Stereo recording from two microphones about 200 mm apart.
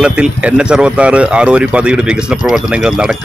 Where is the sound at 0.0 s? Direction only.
5° right (ahead or behind).